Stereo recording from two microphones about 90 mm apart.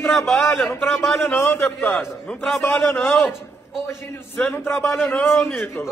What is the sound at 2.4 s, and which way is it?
Speech, centre (ahead or behind).